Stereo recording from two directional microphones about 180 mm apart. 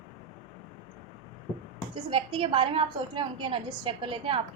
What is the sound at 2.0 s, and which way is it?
A woman's voice, 30° right (ahead or behind).